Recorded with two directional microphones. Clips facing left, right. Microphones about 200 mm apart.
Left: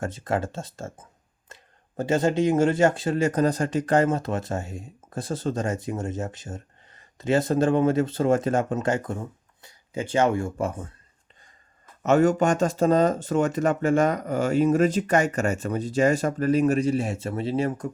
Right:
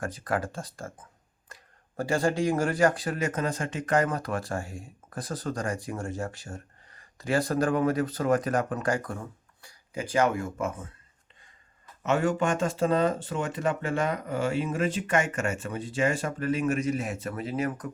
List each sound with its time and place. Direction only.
0.0 s speech: 25° left (ahead or behind)
12.0 s speech: 40° left (ahead or behind)